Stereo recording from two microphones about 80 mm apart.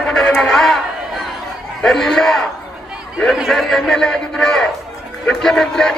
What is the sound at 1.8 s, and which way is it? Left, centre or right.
Speech, centre.